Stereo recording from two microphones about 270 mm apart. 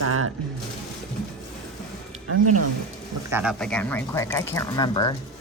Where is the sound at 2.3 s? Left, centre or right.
Right.